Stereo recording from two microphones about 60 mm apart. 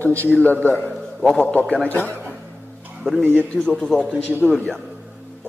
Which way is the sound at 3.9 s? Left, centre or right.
Centre.